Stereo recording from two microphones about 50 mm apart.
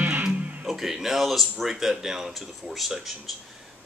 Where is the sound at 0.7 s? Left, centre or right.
Centre.